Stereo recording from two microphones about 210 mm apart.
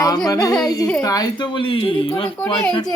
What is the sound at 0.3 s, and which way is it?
Speech, 15° left (ahead or behind).